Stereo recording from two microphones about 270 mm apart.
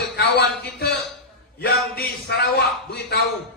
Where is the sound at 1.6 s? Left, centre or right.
Left.